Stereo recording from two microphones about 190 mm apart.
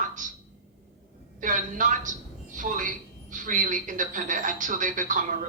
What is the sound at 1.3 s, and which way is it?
A woman's voice, 45° right (ahead or behind).